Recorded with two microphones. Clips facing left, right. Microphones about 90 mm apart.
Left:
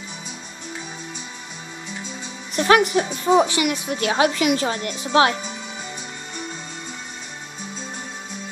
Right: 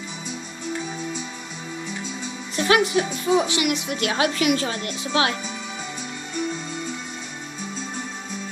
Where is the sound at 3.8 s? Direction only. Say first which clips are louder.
Left 3 dB; 25° left (ahead or behind).